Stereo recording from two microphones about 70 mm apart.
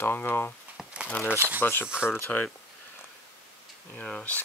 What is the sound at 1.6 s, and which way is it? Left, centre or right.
Speech, left.